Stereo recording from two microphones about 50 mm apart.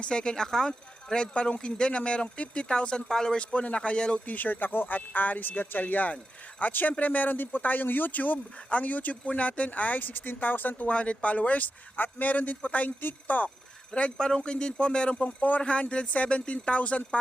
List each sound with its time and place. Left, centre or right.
0.0 s speech: centre
0.7 s a man's voice: left
4.3 s speech: left
10.8 s a man's voice: left
14.2 s a man's voice: centre